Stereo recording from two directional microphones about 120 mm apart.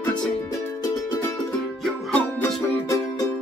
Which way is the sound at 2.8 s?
25° left (ahead or behind).